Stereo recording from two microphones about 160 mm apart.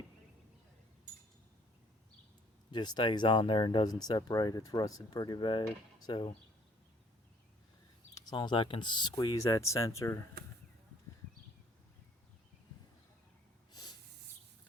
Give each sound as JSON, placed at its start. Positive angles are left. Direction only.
{"t": 2.7, "sound": "speech", "side_deg": 25}
{"t": 8.1, "sound": "speech", "side_deg": 25}